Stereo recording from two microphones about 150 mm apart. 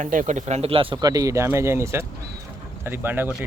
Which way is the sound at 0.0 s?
60° right (ahead or behind).